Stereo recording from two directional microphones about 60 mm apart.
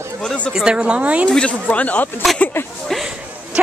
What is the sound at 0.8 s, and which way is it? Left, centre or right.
Speech, centre.